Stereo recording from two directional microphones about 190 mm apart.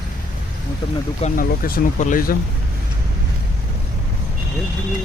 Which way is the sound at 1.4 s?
50° left (ahead or behind).